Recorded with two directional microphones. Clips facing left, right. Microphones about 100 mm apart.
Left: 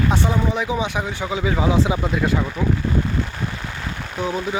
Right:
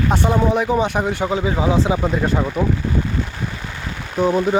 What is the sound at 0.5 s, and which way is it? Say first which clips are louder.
Speech: right 5 dB; 50° right (ahead or behind).